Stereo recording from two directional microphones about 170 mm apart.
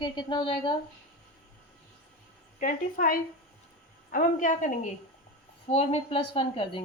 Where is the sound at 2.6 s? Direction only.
55° left (ahead or behind).